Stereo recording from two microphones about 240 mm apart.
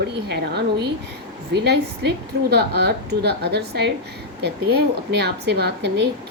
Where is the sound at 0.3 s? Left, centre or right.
Right.